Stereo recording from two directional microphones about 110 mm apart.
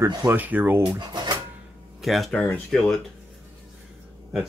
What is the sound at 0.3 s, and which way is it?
Speech, 15° right (ahead or behind).